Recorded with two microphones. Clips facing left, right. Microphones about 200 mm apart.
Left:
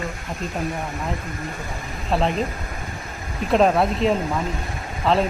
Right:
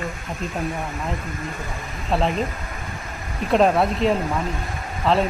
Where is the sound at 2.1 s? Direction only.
Centre (ahead or behind).